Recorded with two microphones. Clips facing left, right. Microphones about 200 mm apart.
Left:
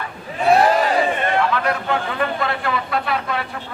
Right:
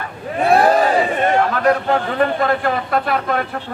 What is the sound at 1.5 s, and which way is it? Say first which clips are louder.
A man's voice: right 5 dB; 40° right (ahead or behind).